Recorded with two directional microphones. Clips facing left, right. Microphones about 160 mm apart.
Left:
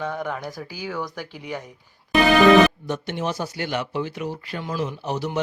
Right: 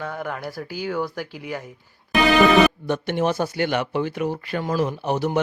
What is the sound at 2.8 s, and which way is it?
Speech, 60° right (ahead or behind).